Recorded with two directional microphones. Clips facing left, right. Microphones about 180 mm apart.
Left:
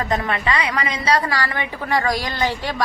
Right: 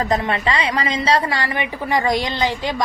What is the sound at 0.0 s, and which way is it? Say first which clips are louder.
A woman's voice: right 2 dB; 30° right (ahead or behind).